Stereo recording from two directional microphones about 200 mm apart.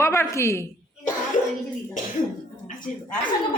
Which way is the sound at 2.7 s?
40° left (ahead or behind).